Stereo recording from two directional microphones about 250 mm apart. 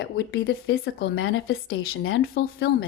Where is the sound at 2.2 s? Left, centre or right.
Left.